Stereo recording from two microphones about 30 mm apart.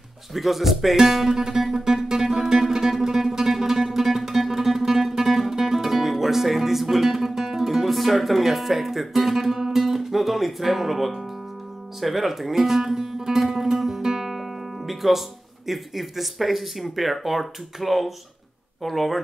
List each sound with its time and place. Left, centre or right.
0.3 s speech: centre
1.3 s music: centre
9.7 s speech: centre
13.5 s music: centre
14.9 s speech: centre